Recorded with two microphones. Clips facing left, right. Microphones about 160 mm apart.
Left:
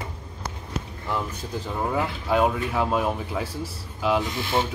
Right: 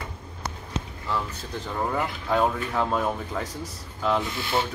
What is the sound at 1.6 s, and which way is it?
Speech, 5° left (ahead or behind).